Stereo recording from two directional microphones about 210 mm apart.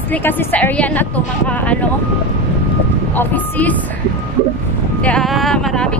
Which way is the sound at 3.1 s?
10° left (ahead or behind).